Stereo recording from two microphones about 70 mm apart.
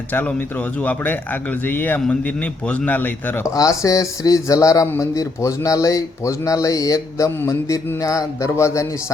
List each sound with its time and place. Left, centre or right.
0.1 s speech: left
3.4 s speech: left
7.3 s a sound: left
7.9 s speech: left